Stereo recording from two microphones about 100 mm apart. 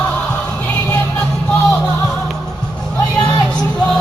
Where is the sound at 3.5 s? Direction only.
10° left (ahead or behind).